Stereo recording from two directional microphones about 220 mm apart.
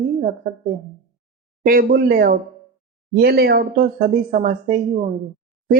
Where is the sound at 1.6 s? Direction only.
40° right (ahead or behind).